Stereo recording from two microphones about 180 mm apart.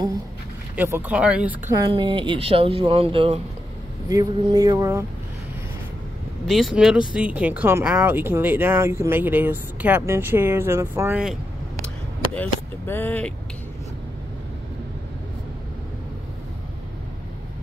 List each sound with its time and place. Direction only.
0.7 s speech: 10° right (ahead or behind)
1.9 s speech: 30° right (ahead or behind)
4.1 s speech: 20° right (ahead or behind)
6.4 s speech: centre (ahead or behind)
12.4 s speech: 10° left (ahead or behind)